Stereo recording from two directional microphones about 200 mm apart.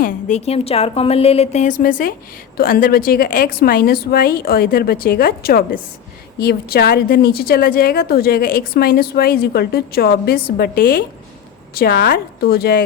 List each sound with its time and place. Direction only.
0.0 s a woman's voice: 35° left (ahead or behind)